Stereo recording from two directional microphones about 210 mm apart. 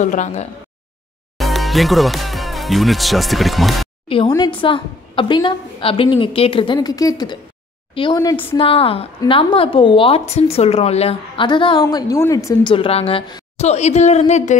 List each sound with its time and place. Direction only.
0.0 s a woman's voice: 35° left (ahead or behind)
1.4 s speech: centre (ahead or behind)
4.3 s a woman's voice: 20° left (ahead or behind)
8.5 s a woman's voice: 25° left (ahead or behind)